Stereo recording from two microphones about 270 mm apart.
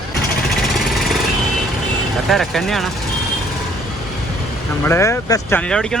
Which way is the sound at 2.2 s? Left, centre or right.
Centre.